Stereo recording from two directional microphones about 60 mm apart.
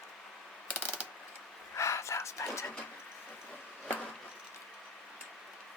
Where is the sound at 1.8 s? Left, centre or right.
Left.